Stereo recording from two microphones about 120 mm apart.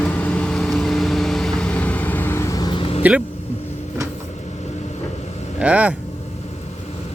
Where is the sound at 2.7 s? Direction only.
50° left (ahead or behind).